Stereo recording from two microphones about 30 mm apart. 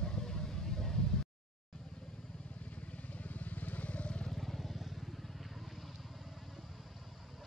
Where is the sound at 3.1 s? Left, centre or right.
Left.